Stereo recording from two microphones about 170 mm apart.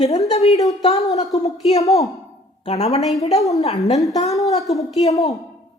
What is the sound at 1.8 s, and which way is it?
Speech, 20° left (ahead or behind).